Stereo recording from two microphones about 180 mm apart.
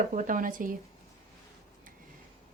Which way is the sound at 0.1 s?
45° right (ahead or behind).